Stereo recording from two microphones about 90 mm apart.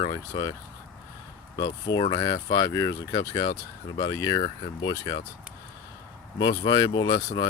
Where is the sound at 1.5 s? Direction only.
45° left (ahead or behind).